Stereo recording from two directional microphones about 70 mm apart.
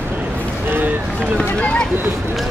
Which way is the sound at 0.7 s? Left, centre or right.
Right.